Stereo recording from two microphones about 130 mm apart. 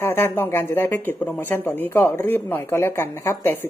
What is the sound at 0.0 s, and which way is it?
Speech, 15° left (ahead or behind).